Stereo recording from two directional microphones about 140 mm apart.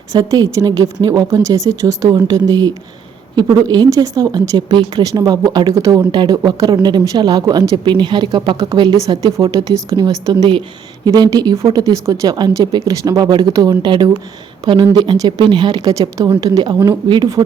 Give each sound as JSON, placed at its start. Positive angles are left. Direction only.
{"t": 0.1, "sound": "speech", "side_deg": -25}
{"t": 6.0, "sound": "speech", "side_deg": -35}